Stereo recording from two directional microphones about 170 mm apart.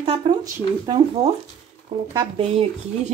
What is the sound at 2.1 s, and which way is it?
Speech, 25° right (ahead or behind).